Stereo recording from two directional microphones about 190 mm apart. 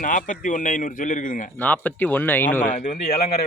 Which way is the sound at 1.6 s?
10° left (ahead or behind).